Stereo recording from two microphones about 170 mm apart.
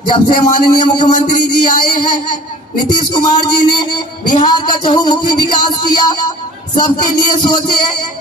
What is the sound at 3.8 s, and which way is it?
Speech, 25° left (ahead or behind).